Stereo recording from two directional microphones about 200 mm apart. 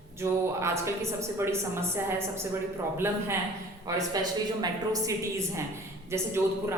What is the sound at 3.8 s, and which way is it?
A man's voice, 15° right (ahead or behind).